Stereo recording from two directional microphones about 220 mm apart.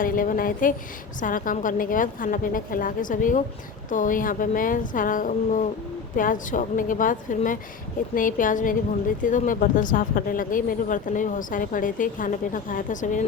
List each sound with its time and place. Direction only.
0.0 s speech: 40° left (ahead or behind)